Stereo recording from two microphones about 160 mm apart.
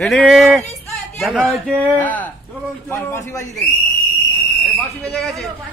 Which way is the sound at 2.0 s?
10° left (ahead or behind).